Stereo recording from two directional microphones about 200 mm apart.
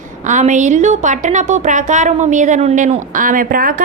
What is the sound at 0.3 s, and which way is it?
A woman's voice, 40° right (ahead or behind).